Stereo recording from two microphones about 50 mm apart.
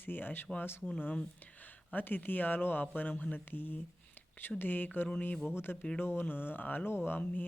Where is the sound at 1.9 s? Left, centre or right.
Left.